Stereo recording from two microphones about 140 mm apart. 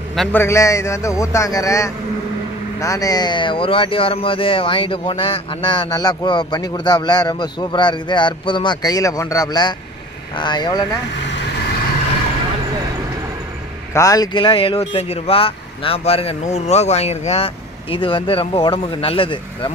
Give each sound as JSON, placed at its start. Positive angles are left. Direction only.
{"t": 0.3, "sound": "a man's voice", "side_deg": 20}
{"t": 13.9, "sound": "speech", "side_deg": 25}